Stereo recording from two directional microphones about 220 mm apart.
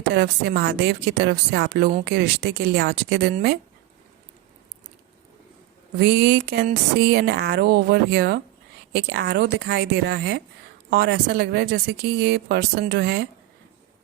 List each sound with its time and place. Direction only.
0.1 s a woman's voice: 50° right (ahead or behind)
6.0 s a woman's voice: 50° right (ahead or behind)